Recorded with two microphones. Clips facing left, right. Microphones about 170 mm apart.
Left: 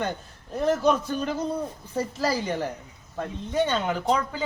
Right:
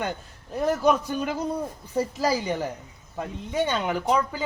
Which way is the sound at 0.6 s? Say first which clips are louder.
Even; 10° right (ahead or behind).